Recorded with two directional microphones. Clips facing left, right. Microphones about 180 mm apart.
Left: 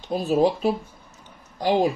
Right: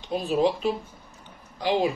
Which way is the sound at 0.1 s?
40° left (ahead or behind).